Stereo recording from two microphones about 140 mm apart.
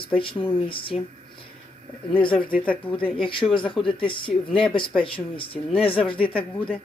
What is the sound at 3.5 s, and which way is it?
Speech, 35° left (ahead or behind).